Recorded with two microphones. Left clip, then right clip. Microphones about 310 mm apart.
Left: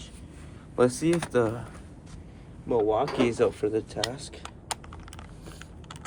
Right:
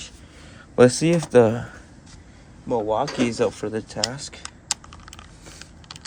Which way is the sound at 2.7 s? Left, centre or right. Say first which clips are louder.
Right 2 dB; centre.